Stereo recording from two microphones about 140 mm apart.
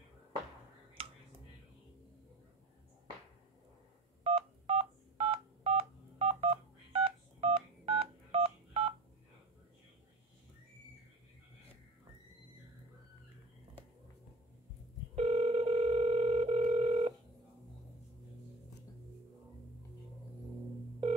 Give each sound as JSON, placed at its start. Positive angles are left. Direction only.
{"t": 1.0, "sound": "finger snapping", "side_deg": -40}
{"t": 4.2, "sound": "telephone dialing", "side_deg": -45}
{"t": 15.1, "sound": "telephone", "side_deg": -45}